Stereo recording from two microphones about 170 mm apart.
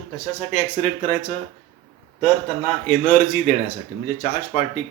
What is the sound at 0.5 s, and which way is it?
Speech, 50° left (ahead or behind).